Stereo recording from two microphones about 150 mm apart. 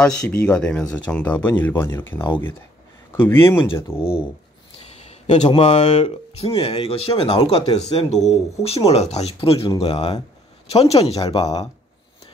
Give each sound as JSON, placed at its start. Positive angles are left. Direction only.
{"t": 0.0, "sound": "speech", "side_deg": 5}
{"t": 4.9, "sound": "a sound", "side_deg": 45}
{"t": 5.6, "sound": "speech", "side_deg": 45}
{"t": 11.1, "sound": "speech", "side_deg": 25}